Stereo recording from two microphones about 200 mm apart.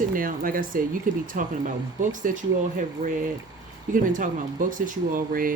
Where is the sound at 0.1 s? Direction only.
45° right (ahead or behind).